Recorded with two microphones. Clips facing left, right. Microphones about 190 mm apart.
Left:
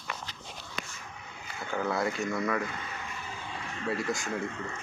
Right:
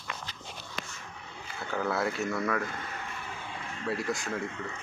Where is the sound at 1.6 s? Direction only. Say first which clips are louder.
Even; centre (ahead or behind).